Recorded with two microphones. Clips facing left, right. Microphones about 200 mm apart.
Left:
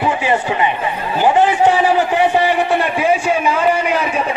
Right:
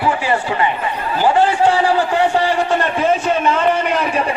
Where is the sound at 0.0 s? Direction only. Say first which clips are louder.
Left 1 dB; 20° left (ahead or behind).